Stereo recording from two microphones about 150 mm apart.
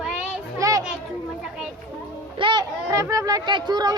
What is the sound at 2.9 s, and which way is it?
Speech, 20° right (ahead or behind).